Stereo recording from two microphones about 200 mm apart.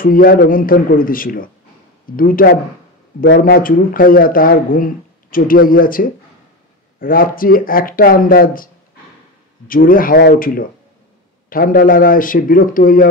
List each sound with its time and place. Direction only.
0.0 s speech: 45° left (ahead or behind)
9.7 s speech: 45° left (ahead or behind)